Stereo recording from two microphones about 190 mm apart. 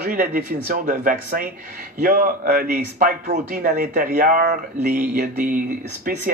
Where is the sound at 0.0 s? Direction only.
50° right (ahead or behind).